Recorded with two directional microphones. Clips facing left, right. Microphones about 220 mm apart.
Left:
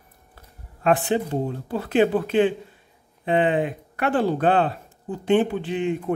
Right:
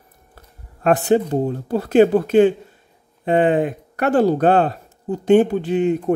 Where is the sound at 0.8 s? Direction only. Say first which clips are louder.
Right 5 dB; 45° right (ahead or behind).